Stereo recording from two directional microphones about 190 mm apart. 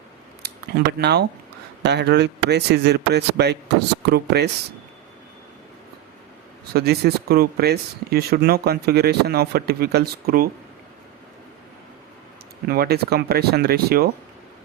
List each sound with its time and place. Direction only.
0.9 s speech: 60° right (ahead or behind)
6.7 s speech: 55° right (ahead or behind)
12.6 s speech: 55° right (ahead or behind)